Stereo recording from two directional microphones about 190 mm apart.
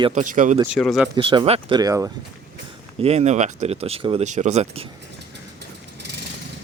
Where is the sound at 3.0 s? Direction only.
35° right (ahead or behind).